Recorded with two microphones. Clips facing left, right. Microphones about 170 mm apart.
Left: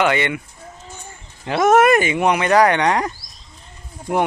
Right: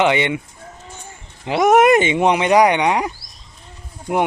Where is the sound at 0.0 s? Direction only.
20° right (ahead or behind).